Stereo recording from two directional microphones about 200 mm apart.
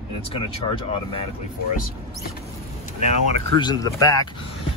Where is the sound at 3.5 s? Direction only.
20° left (ahead or behind).